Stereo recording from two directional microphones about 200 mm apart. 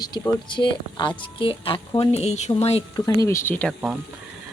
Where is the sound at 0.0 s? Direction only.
20° left (ahead or behind).